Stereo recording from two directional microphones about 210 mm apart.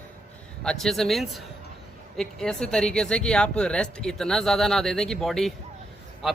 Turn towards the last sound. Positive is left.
turn(degrees=0)  # may be behind; listen again after turning